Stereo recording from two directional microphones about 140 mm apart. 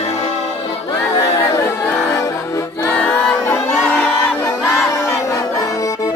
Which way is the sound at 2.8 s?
15° left (ahead or behind).